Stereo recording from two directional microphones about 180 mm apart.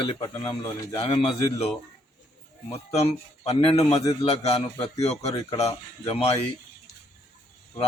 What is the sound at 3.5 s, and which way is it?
Speech, 30° left (ahead or behind).